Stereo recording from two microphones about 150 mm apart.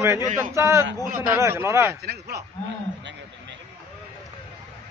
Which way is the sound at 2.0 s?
90° right.